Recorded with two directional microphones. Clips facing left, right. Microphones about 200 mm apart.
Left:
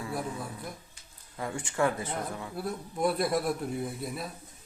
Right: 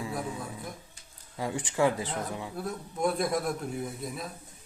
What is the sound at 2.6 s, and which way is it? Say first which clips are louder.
A man's voice: left 1 dB; 5° left (ahead or behind).